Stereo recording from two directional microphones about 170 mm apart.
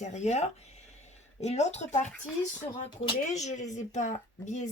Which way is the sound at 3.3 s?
45° left (ahead or behind).